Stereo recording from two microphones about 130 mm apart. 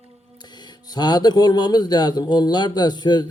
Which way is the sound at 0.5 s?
35° left (ahead or behind).